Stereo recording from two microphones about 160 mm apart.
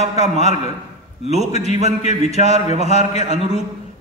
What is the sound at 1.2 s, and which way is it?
Speech, 40° left (ahead or behind).